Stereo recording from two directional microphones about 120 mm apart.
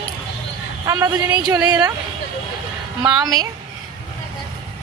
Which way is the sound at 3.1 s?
35° right (ahead or behind).